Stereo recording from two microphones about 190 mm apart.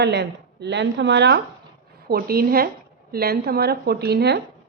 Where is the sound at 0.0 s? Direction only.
65° right (ahead or behind).